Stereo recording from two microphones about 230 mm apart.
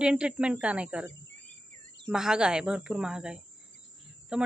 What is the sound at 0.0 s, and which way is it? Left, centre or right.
Speech, centre.